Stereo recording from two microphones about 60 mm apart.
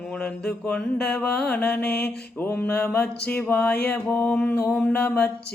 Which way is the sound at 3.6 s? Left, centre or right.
Left.